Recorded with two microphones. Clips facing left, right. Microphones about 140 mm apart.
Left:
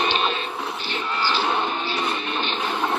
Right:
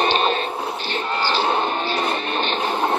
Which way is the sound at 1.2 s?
30° right (ahead or behind).